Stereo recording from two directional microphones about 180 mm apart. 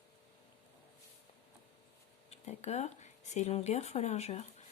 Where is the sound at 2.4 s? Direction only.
40° left (ahead or behind).